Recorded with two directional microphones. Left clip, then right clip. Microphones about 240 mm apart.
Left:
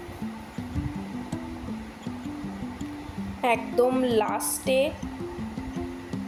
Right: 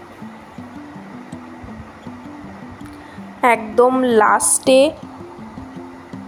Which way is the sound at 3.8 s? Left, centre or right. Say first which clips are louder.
Right 9 dB; centre.